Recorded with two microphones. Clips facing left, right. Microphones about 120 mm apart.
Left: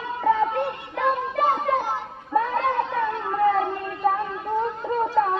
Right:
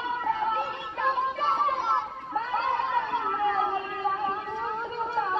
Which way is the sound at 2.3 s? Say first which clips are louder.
Left 6 dB; 55° left (ahead or behind).